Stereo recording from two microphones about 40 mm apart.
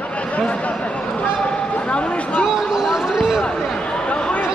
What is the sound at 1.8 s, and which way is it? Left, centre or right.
Speech, left.